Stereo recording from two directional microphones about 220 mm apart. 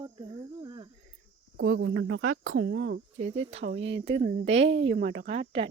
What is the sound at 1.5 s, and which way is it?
Speech, 65° right (ahead or behind).